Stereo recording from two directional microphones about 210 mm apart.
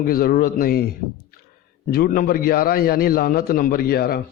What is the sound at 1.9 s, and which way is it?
A man's voice, 45° left (ahead or behind).